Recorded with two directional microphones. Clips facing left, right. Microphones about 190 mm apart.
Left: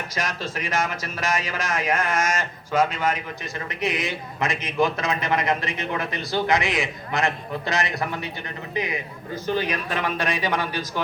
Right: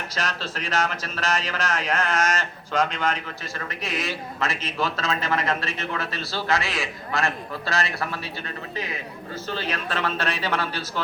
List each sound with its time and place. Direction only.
0.1 s speech: 10° left (ahead or behind)